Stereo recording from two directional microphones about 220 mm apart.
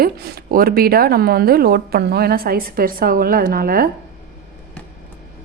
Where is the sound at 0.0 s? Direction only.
40° right (ahead or behind).